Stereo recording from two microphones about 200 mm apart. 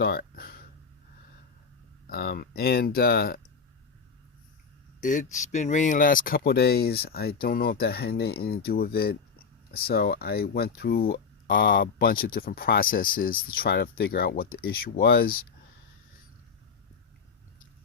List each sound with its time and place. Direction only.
0.0 s a sound: 50° left (ahead or behind)
2.0 s speech: 50° left (ahead or behind)
4.9 s speech: 40° left (ahead or behind)